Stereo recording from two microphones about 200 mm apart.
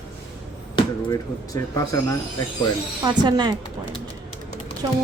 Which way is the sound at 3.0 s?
20° right (ahead or behind).